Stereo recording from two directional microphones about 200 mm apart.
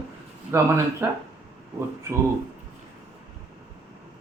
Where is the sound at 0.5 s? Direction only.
15° right (ahead or behind).